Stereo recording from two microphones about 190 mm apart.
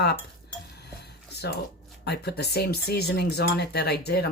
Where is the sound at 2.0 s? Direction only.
60° left (ahead or behind).